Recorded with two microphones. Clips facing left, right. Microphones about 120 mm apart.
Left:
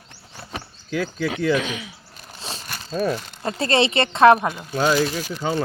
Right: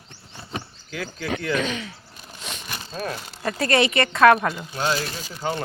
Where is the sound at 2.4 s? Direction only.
30° left (ahead or behind).